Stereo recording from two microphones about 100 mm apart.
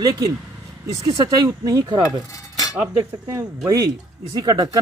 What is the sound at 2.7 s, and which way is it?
Speech, 25° right (ahead or behind).